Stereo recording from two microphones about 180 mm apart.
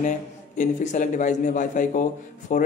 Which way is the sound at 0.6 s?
45° left (ahead or behind).